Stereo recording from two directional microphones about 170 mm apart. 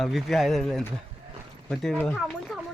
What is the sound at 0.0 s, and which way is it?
Speech, centre (ahead or behind).